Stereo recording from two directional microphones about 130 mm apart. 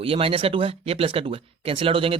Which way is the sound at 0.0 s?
45° right (ahead or behind).